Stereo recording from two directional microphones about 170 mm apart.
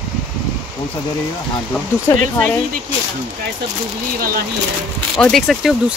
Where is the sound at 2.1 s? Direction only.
20° left (ahead or behind).